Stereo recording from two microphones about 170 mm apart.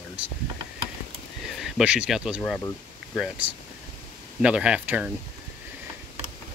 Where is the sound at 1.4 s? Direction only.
5° right (ahead or behind).